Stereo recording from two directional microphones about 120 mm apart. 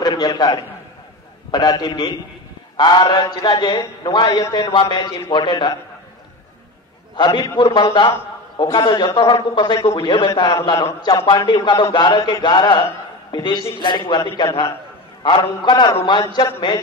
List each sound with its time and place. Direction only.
0.0 s a sound: 35° left (ahead or behind)
1.5 s a man's voice: 35° left (ahead or behind)
7.2 s a man's voice: 35° left (ahead or behind)
9.3 s a man's voice: 40° left (ahead or behind)